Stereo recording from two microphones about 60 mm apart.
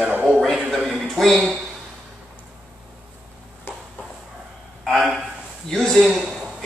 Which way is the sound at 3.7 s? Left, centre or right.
Left.